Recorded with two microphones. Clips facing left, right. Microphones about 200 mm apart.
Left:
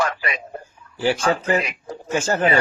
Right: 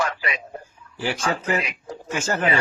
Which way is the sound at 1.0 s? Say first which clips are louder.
Left 5 dB; 30° left (ahead or behind).